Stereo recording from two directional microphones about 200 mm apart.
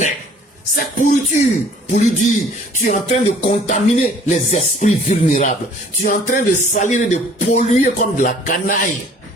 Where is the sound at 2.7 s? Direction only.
35° left (ahead or behind).